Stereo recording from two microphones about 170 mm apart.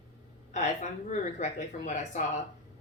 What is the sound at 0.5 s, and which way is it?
A woman's voice, 45° left (ahead or behind).